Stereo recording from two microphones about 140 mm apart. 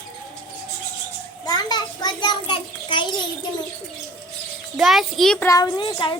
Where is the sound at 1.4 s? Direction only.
30° left (ahead or behind).